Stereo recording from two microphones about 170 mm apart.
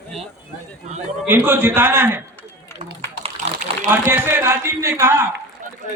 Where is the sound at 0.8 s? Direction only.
40° right (ahead or behind).